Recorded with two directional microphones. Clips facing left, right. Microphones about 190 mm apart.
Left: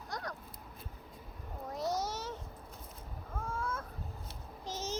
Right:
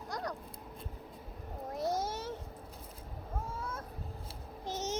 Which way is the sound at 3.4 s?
40° right (ahead or behind).